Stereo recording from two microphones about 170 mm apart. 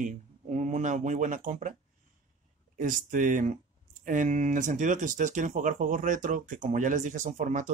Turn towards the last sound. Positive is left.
turn(degrees=-45)  # may be behind; listen again after turning